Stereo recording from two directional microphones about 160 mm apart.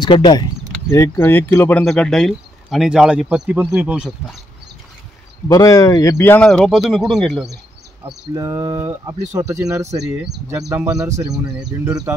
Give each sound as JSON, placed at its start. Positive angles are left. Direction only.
{"t": 0.0, "sound": "speech", "side_deg": 30}
{"t": 5.5, "sound": "speech", "side_deg": 20}
{"t": 8.4, "sound": "speech", "side_deg": -20}